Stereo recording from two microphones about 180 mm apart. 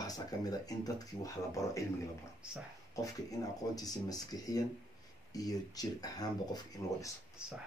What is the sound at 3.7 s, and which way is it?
Speech, 20° left (ahead or behind).